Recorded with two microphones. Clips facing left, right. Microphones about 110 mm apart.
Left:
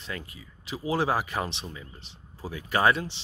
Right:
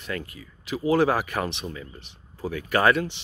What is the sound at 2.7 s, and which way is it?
Speech, 25° left (ahead or behind).